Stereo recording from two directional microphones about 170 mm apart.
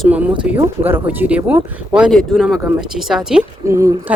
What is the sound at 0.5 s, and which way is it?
Speech, 10° right (ahead or behind).